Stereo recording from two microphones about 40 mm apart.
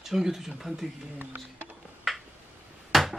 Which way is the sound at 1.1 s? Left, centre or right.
Right.